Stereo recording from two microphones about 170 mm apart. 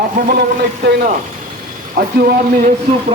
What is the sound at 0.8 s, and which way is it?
Speech, 80° right.